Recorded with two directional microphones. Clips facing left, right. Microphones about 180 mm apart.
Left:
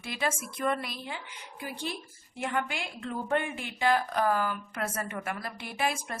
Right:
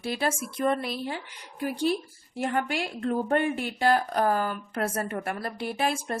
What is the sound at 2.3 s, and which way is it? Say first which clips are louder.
A woman's voice: right 5 dB; 45° right (ahead or behind).